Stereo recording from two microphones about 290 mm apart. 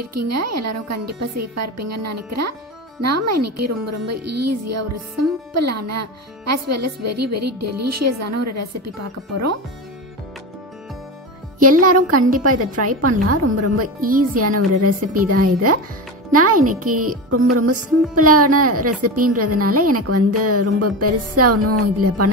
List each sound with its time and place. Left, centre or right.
0.0 s a woman's voice: right
11.6 s a woman's voice: right
13.8 s speech: right
14.4 s a woman's voice: right